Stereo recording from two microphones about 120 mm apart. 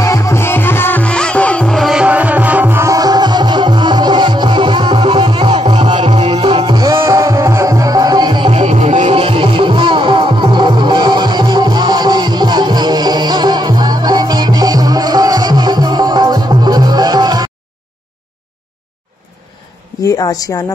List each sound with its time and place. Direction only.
0.0 s music: 25° left (ahead or behind); by 6.1 s 40° right (ahead or behind)
6.1 s music: 55° right (ahead or behind); by 8.5 s 35° right (ahead or behind)
8.5 s music: 65° right (ahead or behind); by 9.1 s 85° right
9.1 s music: 50° right (ahead or behind)
20.1 s a woman's voice: 30° left (ahead or behind)